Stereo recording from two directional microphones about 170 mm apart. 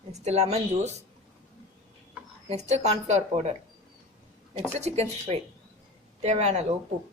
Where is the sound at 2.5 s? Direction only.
40° right (ahead or behind).